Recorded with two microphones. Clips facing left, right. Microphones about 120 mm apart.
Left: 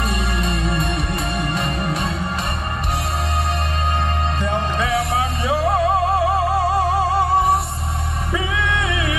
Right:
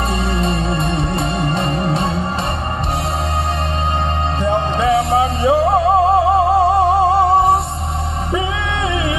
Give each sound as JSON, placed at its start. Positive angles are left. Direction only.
{"t": 0.1, "sound": "music", "side_deg": -30}
{"t": 4.4, "sound": "music", "side_deg": -25}